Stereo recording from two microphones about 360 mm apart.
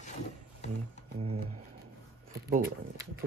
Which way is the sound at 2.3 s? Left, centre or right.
Right.